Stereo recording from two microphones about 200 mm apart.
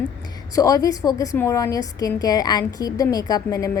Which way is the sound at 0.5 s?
15° left (ahead or behind).